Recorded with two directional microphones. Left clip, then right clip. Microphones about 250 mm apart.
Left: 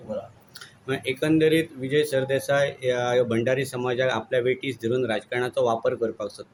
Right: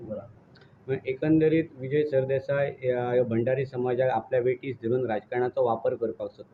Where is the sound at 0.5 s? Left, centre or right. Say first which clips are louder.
Left 2 dB; centre.